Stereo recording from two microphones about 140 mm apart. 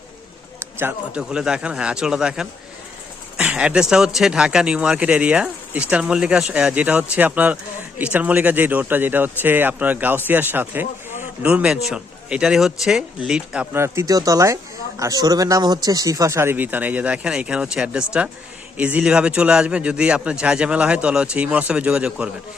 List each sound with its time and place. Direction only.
0.8 s speech: 10° right (ahead or behind)
13.8 s speech: 20° right (ahead or behind)